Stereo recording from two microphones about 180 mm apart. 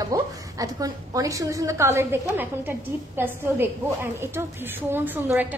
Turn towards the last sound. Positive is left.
turn(degrees=-10)  # may be behind; listen again after turning